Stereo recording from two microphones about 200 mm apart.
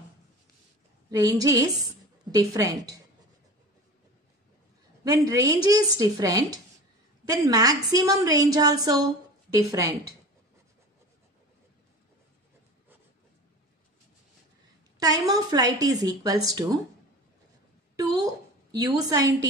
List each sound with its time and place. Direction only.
1.1 s a woman's voice: 20° right (ahead or behind)
5.0 s a woman's voice: 20° right (ahead or behind)
15.0 s a woman's voice: 20° right (ahead or behind)
17.9 s a woman's voice: 20° right (ahead or behind)